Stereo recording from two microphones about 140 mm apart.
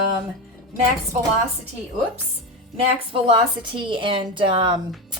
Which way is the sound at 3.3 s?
35° right (ahead or behind).